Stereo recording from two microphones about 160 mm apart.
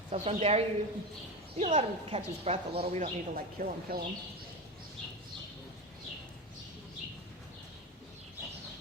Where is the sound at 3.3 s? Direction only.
65° right (ahead or behind).